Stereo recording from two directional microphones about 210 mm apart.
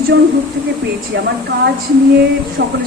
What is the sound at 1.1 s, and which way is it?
Speech, 50° right (ahead or behind).